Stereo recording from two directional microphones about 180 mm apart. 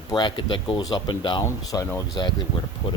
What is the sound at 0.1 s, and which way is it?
Speech, 25° left (ahead or behind).